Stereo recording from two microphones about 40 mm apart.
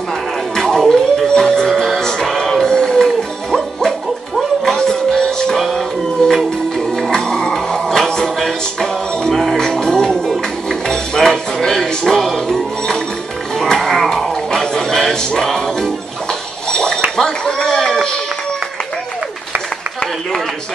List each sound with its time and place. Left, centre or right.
0.6 s music: centre
4.6 s music: centre
13.6 s a sound: centre